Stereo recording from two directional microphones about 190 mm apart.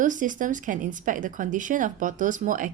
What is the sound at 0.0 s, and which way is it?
A woman's voice, 40° right (ahead or behind).